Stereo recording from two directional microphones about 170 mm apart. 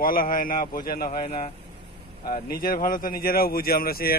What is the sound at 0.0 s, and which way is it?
Speech, 55° left (ahead or behind).